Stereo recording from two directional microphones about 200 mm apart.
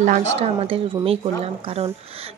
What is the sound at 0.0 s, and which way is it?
Speech, 35° right (ahead or behind).